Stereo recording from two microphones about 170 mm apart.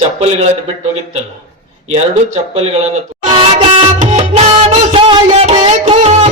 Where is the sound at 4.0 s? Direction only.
40° right (ahead or behind).